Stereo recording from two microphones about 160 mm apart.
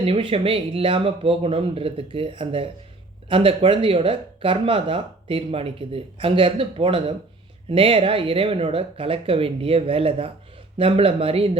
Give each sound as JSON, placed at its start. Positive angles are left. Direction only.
{"t": 0.0, "sound": "speech", "side_deg": -35}